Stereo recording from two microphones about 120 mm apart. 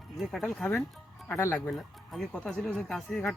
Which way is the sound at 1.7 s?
5° left (ahead or behind).